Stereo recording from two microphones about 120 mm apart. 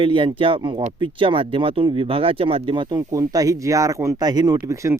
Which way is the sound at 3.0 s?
30° right (ahead or behind).